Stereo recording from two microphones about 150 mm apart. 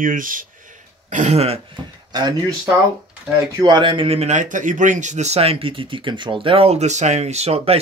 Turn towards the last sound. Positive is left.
turn(degrees=-45)  # may be behind; listen again after turning